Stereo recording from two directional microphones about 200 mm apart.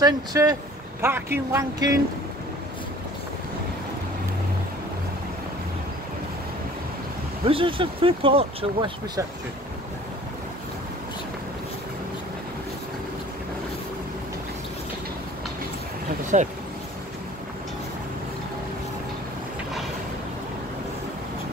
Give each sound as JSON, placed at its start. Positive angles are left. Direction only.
{"t": 0.0, "sound": "speech", "side_deg": -15}
{"t": 7.4, "sound": "speech", "side_deg": -25}
{"t": 16.3, "sound": "speech", "side_deg": -40}